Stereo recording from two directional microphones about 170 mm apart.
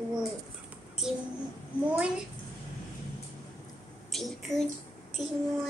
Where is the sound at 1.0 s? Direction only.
Centre (ahead or behind).